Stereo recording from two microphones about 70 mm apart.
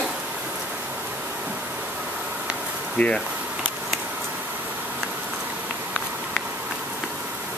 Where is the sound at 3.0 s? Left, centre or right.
Left.